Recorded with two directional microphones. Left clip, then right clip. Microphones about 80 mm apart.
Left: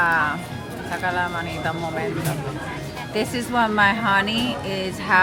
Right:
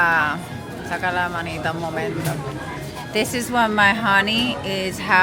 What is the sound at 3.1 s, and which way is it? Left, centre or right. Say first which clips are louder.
Speech: right 2 dB; right.